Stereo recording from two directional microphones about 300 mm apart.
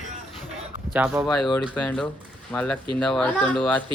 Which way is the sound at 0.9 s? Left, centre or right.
Centre.